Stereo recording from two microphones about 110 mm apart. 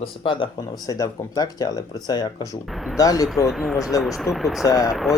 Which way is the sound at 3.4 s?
Centre (ahead or behind).